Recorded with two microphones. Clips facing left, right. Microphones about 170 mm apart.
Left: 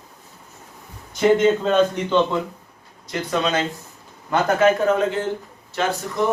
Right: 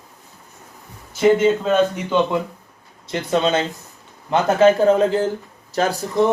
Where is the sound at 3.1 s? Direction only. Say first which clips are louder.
Right 4 dB; 25° right (ahead or behind).